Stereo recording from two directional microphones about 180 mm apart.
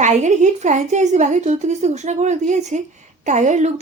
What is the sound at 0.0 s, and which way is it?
Speech, 40° right (ahead or behind).